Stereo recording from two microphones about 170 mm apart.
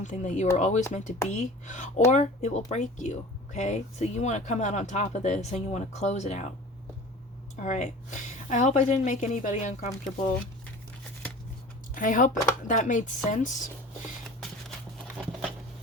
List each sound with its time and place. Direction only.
0.0 s speech: 45° left (ahead or behind)
7.6 s speech: 45° left (ahead or behind)
11.9 s speech: 50° left (ahead or behind)
15.2 s a sound: centre (ahead or behind)